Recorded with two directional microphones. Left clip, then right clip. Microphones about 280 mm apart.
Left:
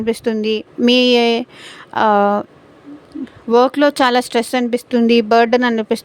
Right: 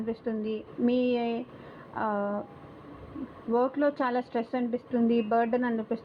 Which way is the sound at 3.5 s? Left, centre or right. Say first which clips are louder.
Left 14 dB; left.